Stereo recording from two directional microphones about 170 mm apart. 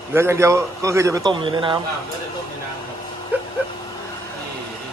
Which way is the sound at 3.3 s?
10° right (ahead or behind).